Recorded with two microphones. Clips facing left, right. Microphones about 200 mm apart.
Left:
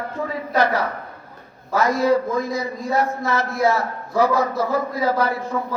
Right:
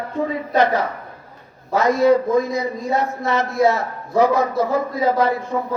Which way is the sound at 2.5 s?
20° right (ahead or behind).